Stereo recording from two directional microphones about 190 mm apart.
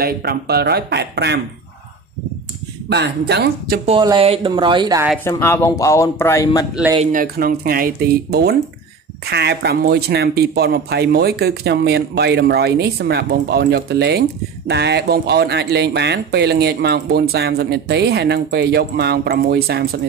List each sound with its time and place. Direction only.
0.0 s speech: 55° right (ahead or behind)
2.9 s speech: 60° right (ahead or behind)
3.8 s speech: 25° right (ahead or behind)
5.4 s a man's voice: 10° left (ahead or behind)
7.0 s speech: 45° right (ahead or behind)